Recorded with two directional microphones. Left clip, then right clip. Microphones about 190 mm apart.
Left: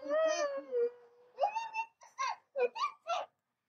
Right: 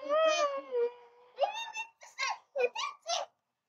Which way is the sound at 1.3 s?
40° right (ahead or behind).